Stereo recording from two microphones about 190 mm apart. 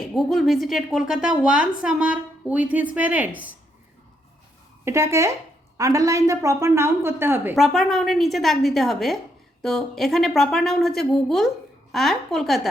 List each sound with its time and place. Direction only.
0.1 s a woman's voice: centre (ahead or behind)
4.9 s a woman's voice: 15° right (ahead or behind)
7.5 s a woman's voice: centre (ahead or behind)